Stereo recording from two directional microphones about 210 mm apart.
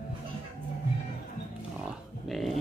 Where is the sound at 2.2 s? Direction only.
Centre (ahead or behind).